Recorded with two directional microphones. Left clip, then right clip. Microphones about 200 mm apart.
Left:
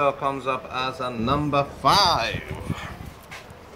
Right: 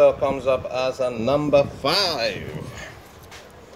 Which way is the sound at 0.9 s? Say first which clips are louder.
Right 4 dB; 15° left (ahead or behind).